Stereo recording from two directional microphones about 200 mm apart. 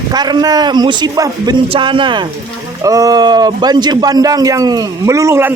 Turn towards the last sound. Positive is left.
turn(degrees=-15)  # may be behind; listen again after turning